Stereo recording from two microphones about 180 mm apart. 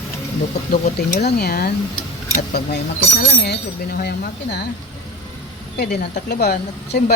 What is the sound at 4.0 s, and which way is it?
Speech, 65° left (ahead or behind).